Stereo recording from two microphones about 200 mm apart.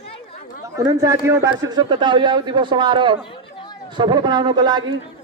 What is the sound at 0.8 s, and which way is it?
A man's voice, 15° right (ahead or behind).